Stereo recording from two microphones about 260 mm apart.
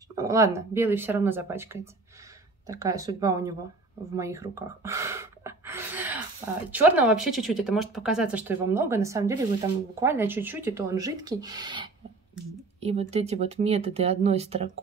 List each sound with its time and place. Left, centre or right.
0.1 s speech: centre
4.1 s gasp: centre
6.7 s speech: centre; by 14.7 s right